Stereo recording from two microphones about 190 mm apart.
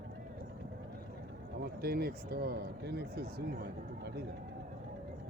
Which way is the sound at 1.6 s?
55° right (ahead or behind).